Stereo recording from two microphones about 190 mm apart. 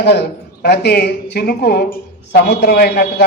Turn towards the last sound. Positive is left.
turn(degrees=55)  # may be behind; listen again after turning